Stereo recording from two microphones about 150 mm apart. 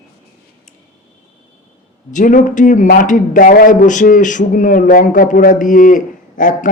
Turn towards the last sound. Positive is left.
turn(degrees=60)  # may be behind; listen again after turning